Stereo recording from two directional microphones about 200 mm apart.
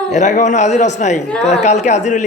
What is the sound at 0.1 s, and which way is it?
A man's voice, 35° left (ahead or behind).